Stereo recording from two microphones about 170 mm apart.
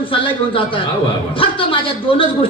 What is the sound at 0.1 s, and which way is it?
A woman's voice, 30° left (ahead or behind).